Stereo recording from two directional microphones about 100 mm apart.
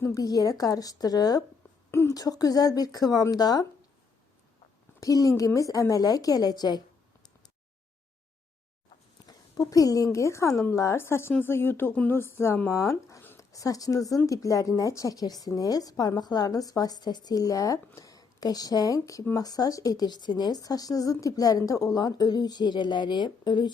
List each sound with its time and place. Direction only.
0.0 s a woman's voice: 35° left (ahead or behind)
1.9 s a woman's voice: 30° left (ahead or behind)
4.9 s a woman's voice: 35° left (ahead or behind)
9.2 s a woman's voice: 35° left (ahead or behind)